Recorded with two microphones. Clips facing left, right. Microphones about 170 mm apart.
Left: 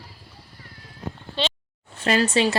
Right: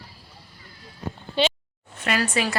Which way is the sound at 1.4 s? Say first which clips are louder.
Right 5 dB; 10° right (ahead or behind).